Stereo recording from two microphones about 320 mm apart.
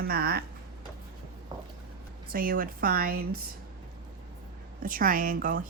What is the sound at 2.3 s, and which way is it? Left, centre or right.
Speech, right.